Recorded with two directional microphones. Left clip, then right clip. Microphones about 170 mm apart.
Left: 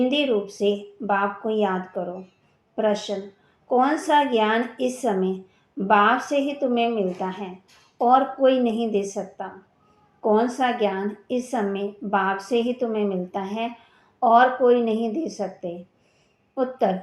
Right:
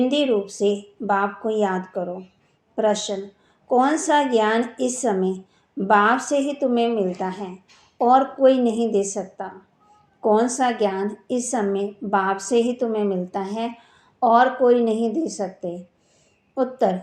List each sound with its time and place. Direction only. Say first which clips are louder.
0.0 s a woman's voice: right 2 dB; 30° right (ahead or behind)